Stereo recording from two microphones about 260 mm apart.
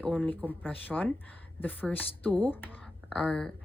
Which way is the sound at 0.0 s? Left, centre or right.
Centre.